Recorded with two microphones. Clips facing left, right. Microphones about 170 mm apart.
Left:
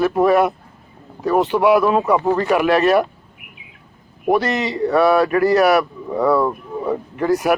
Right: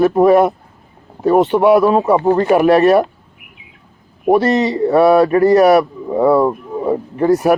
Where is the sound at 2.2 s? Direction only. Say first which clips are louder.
Right 5 dB; 35° right (ahead or behind).